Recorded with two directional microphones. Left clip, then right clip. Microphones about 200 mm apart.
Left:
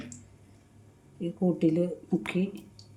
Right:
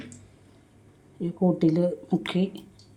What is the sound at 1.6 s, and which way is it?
Speech, 10° right (ahead or behind).